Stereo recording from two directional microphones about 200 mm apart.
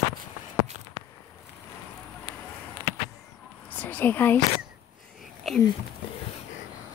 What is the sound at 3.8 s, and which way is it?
Speech, 10° left (ahead or behind).